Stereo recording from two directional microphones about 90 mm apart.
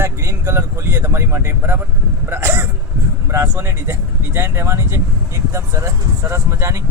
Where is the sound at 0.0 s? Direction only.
25° right (ahead or behind).